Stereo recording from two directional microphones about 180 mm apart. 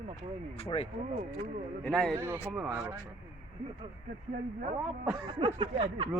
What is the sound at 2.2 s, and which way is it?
Speech, 15° right (ahead or behind).